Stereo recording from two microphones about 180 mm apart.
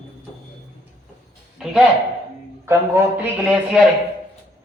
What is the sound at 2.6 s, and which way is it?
Speech, 15° right (ahead or behind).